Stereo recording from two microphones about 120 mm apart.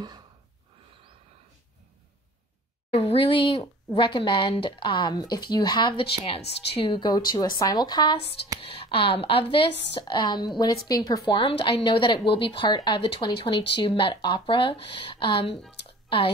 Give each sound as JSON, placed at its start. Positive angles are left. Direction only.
{"t": 2.9, "sound": "a woman's voice", "side_deg": 55}
{"t": 6.9, "sound": "a woman's voice", "side_deg": 35}
{"t": 11.2, "sound": "a woman's voice", "side_deg": 45}